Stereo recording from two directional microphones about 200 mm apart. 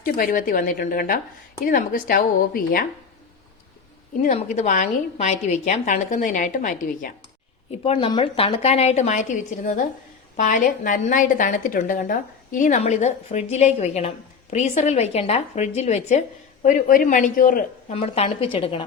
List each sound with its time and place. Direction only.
0.0 s a woman's voice: 45° left (ahead or behind)
4.3 s a woman's voice: 35° left (ahead or behind)
7.7 s a woman's voice: 25° left (ahead or behind); by 17.9 s 45° left (ahead or behind)
17.9 s a woman's voice: 30° left (ahead or behind)